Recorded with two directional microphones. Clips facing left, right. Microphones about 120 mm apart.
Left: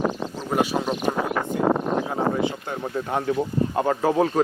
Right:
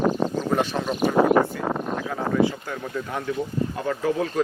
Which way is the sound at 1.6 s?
35° left (ahead or behind).